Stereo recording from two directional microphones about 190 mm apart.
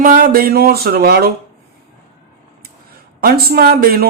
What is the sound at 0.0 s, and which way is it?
Speech, 45° right (ahead or behind).